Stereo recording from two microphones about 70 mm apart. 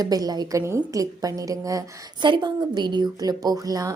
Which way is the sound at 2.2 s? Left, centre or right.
Right.